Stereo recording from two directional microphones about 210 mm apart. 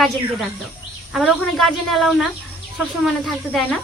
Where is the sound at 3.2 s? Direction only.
Centre (ahead or behind).